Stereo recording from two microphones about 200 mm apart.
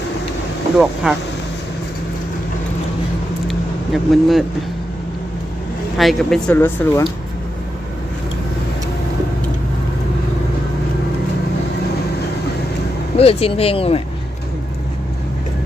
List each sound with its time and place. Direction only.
1.0 s speech: 5° right (ahead or behind)
3.9 s speech: centre (ahead or behind)
6.0 s speech: centre (ahead or behind)
13.1 s speech: 30° left (ahead or behind)